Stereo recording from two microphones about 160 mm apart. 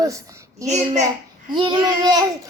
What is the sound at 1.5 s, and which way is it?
Speech, 30° right (ahead or behind).